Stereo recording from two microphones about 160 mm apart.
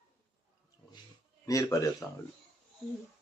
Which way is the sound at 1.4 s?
20° left (ahead or behind).